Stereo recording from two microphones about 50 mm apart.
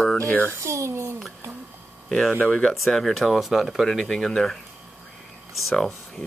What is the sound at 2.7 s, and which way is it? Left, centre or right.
Speech, centre.